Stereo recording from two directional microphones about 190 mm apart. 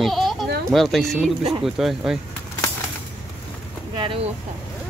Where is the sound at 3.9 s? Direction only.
25° right (ahead or behind).